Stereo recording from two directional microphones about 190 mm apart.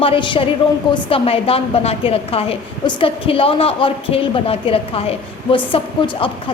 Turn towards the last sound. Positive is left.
turn(degrees=25)  # may be behind; listen again after turning